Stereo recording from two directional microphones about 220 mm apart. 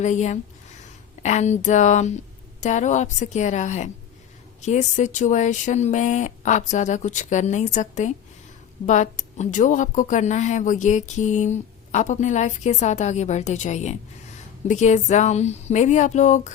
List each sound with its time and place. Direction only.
0.0 s speech: 35° left (ahead or behind)